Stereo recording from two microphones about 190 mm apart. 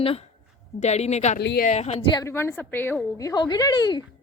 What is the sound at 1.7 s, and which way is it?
Speech, 35° left (ahead or behind).